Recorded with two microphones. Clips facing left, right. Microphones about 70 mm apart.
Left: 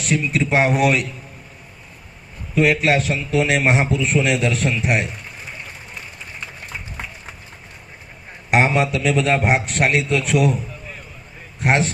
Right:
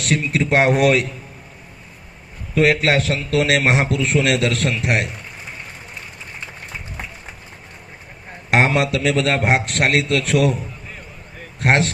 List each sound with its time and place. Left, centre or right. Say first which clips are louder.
0.0 s a man's voice: even; right
2.6 s a man's voice: right 1 dB; right
3.9 s a man's voice: right 1 dB; right
8.4 s a man's voice: even; right
9.0 s a man's voice: left 1 dB; right
11.6 s a man's voice: right 1 dB; right